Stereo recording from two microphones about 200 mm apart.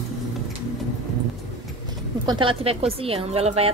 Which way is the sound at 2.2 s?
25° right (ahead or behind).